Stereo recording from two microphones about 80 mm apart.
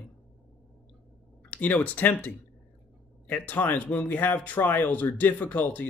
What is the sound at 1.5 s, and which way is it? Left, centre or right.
Speech, centre.